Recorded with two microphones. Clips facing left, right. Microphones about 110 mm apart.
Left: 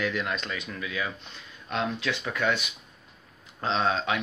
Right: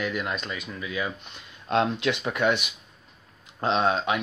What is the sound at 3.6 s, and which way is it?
Speech, 15° right (ahead or behind).